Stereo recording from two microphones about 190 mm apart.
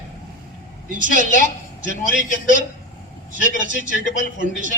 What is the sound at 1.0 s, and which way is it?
A man's voice, 45° right (ahead or behind).